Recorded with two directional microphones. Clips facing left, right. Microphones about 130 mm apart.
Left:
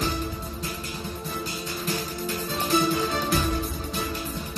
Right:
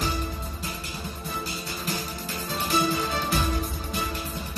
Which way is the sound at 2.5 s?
5° right (ahead or behind).